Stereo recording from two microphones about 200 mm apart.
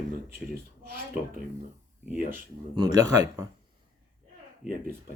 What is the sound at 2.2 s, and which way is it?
Speech, 45° right (ahead or behind).